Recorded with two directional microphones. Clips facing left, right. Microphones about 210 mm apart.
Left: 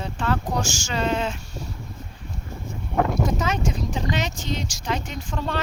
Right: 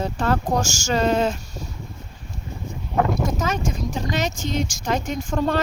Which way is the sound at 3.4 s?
45° right (ahead or behind).